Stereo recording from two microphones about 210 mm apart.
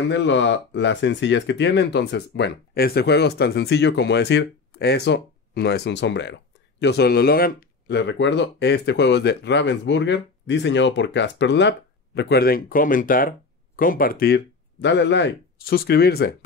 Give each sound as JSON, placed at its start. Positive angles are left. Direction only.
{"t": 0.1, "sound": "speech", "side_deg": 60}